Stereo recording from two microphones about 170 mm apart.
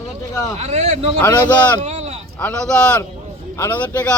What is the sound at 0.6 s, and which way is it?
Speech, 40° right (ahead or behind).